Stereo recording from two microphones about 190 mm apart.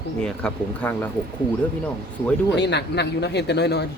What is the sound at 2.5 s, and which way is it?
Speech, 65° left (ahead or behind).